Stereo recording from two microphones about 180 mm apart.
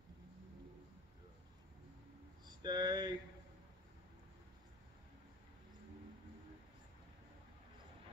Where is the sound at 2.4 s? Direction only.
25° right (ahead or behind).